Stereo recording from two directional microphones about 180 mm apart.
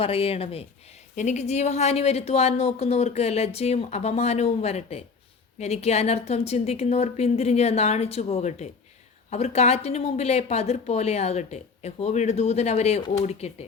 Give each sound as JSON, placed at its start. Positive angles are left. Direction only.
{"t": 0.0, "sound": "a woman's voice", "side_deg": 30}